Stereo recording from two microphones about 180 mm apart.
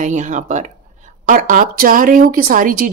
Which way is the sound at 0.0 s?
45° right (ahead or behind).